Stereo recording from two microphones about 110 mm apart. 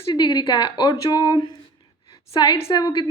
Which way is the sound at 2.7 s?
40° left (ahead or behind).